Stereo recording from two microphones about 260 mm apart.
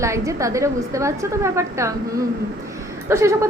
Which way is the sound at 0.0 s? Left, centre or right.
Centre.